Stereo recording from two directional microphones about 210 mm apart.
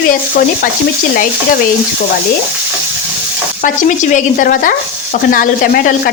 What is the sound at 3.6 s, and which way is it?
Stir, 35° left (ahead or behind).